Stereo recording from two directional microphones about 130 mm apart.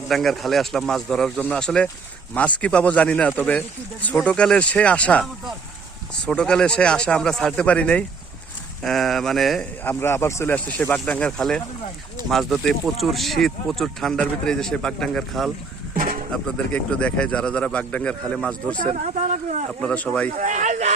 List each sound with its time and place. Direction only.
0.1 s speech: centre (ahead or behind)
9.8 s speech: 15° left (ahead or behind); by 15.5 s centre (ahead or behind)
16.0 s a sound: 90° right
16.3 s speech: 10° left (ahead or behind)
18.8 s speech: 80° right
19.8 s speech: 10° left (ahead or behind)
20.3 s speech: 75° right (ahead or behind)